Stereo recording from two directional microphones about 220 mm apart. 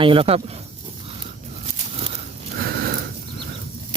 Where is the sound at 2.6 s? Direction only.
45° right (ahead or behind).